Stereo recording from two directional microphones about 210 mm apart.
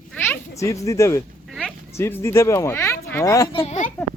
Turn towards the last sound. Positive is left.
turn(degrees=35)  # may be behind; listen again after turning